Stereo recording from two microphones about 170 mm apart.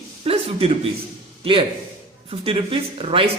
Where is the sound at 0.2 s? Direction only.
35° right (ahead or behind).